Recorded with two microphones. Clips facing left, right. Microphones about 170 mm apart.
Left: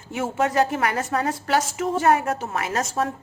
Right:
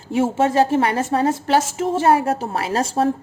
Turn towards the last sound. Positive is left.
turn(degrees=-30)  # may be behind; listen again after turning